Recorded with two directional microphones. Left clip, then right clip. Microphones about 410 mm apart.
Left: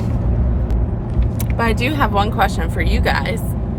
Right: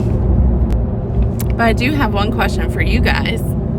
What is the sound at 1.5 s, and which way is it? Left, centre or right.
Speech, centre.